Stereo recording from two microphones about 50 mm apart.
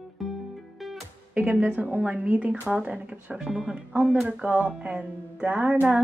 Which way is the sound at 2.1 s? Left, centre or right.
Right.